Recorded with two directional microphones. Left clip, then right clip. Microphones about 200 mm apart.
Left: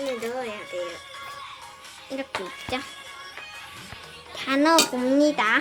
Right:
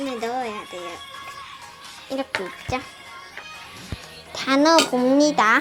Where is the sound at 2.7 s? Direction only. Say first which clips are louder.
Right 3 dB; 10° left (ahead or behind).